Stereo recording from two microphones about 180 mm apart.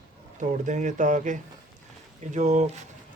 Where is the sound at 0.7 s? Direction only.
45° right (ahead or behind).